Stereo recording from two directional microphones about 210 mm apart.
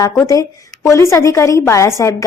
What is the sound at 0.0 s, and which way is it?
A woman's voice, 15° left (ahead or behind).